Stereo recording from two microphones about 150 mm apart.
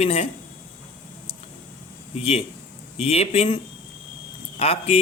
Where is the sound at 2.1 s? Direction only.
40° left (ahead or behind).